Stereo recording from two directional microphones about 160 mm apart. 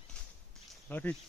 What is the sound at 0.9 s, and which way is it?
Speech, 10° left (ahead or behind).